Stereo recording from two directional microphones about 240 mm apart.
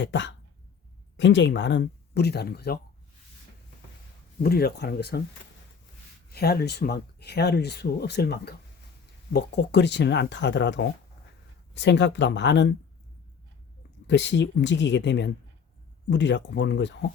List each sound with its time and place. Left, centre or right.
0.0 s speech: left
4.4 s speech: left
6.3 s speech: left
14.1 s speech: left